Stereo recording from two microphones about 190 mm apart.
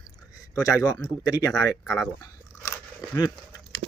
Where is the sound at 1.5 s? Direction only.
5° left (ahead or behind).